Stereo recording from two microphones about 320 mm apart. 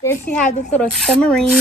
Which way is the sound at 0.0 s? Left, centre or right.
Centre.